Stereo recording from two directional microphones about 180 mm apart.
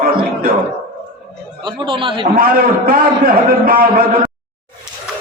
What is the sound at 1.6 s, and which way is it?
Speech, 25° right (ahead or behind).